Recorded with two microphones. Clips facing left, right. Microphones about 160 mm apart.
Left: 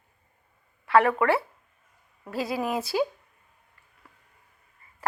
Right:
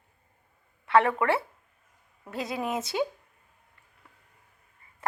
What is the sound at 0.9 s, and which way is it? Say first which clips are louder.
Speech: left 2 dB; 25° right (ahead or behind).